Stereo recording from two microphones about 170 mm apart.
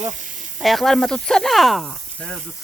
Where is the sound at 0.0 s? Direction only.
45° right (ahead or behind).